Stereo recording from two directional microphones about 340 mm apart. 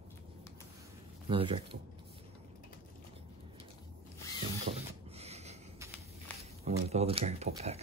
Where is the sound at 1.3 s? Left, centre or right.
Centre.